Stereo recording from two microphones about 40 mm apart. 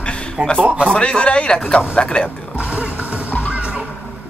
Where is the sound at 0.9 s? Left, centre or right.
Left.